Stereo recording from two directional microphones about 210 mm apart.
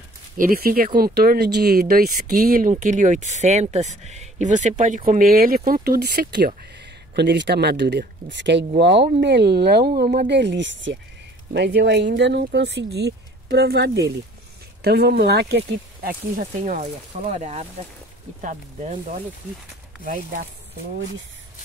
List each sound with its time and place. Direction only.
0.4 s speech: 45° right (ahead or behind)